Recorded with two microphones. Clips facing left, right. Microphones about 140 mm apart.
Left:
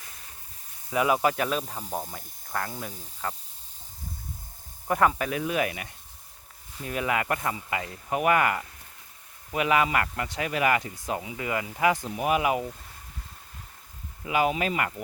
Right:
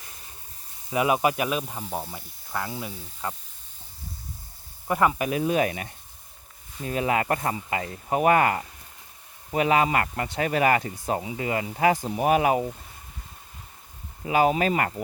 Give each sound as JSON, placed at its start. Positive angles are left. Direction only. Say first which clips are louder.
{"t": 0.9, "sound": "speech", "louder": "right 1 dB", "side_deg": -20}
{"t": 4.9, "sound": "speech", "louder": "right 1 dB", "side_deg": -5}
{"t": 5.1, "sound": "speech", "louder": "right 3 dB", "side_deg": -15}
{"t": 5.4, "sound": "speech", "louder": "right 5 dB", "side_deg": -30}
{"t": 14.3, "sound": "speech", "louder": "right 4 dB", "side_deg": -35}